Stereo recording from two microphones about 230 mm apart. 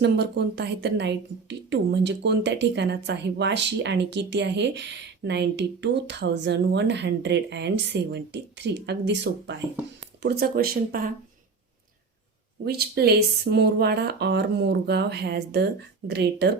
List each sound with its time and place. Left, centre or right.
0.0 s a woman's voice: right
12.6 s a woman's voice: right